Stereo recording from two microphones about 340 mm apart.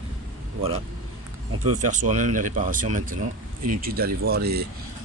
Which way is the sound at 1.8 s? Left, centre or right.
Right.